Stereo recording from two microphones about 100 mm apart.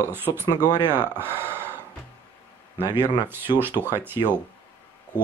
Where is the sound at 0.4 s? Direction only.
20° right (ahead or behind).